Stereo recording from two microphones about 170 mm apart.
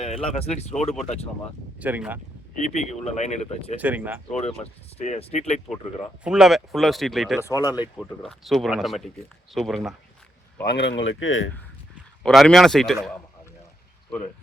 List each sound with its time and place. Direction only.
0.0 s speech: 35° left (ahead or behind)
1.8 s speech: 10° right (ahead or behind)
2.6 s speech: 40° left (ahead or behind)
3.8 s speech: 10° right (ahead or behind)
4.4 s speech: 40° left (ahead or behind)
6.2 s speech: 5° right (ahead or behind)
7.4 s speech: 20° left (ahead or behind)
7.9 s speech: centre (ahead or behind)
10.6 s speech: 80° left
12.2 s speech: 5° left (ahead or behind)